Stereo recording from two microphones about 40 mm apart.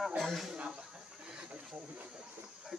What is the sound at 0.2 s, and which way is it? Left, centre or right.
Speech, centre.